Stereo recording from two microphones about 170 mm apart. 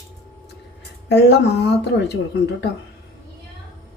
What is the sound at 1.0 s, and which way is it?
Speech, 80° left.